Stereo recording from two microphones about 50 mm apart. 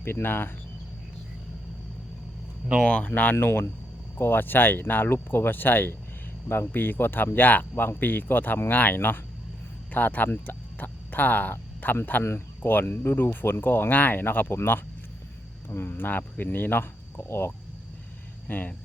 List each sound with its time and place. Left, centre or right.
0.0 s speech: left
2.8 s speech: left
3.4 s speech: left
12.2 s speech: left
14.5 s speech: left
18.4 s speech: left